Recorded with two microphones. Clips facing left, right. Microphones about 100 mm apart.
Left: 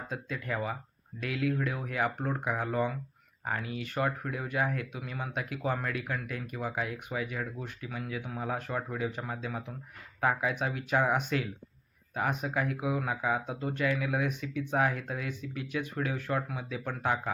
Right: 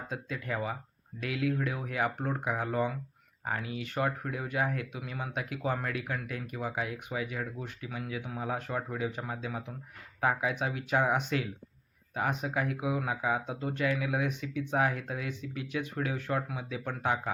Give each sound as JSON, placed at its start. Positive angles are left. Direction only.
{"t": 0.1, "sound": "speech", "side_deg": -25}